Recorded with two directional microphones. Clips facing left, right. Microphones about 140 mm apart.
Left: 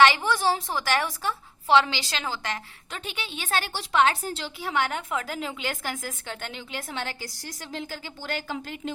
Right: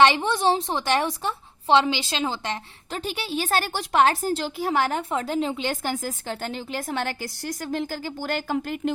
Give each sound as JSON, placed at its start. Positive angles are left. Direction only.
{"t": 0.0, "sound": "a woman's voice", "side_deg": -25}
{"t": 2.9, "sound": "a woman's voice", "side_deg": -40}